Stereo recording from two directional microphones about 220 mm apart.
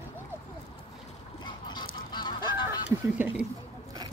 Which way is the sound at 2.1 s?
20° left (ahead or behind).